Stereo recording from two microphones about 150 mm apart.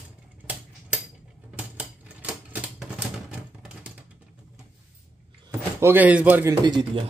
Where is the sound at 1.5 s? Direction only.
10° right (ahead or behind).